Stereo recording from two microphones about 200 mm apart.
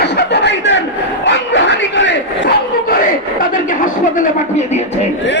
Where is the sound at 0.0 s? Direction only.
60° left (ahead or behind).